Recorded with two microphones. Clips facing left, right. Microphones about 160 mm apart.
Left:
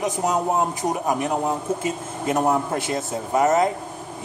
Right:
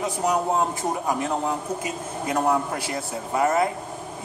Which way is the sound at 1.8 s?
25° left (ahead or behind).